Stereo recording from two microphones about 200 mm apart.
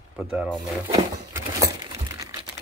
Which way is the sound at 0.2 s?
5° right (ahead or behind).